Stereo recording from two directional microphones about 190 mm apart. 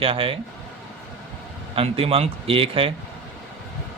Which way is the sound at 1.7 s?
30° right (ahead or behind).